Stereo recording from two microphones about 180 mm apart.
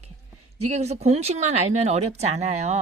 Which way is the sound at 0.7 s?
35° right (ahead or behind).